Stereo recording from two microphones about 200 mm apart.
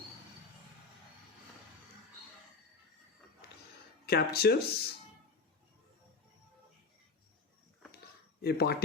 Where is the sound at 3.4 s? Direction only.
55° left (ahead or behind).